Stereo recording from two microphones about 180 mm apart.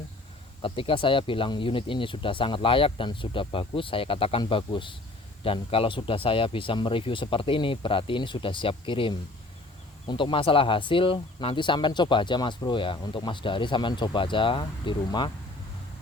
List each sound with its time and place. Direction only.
0.6 s speech: 30° left (ahead or behind)